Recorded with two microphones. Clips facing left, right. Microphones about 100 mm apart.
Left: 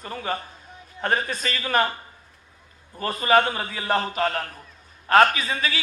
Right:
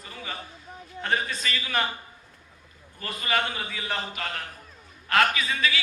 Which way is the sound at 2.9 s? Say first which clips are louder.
Left 9 dB; 40° left (ahead or behind).